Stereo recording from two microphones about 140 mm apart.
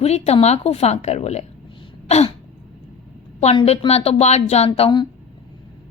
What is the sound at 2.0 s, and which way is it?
Throat clearing, 50° left (ahead or behind).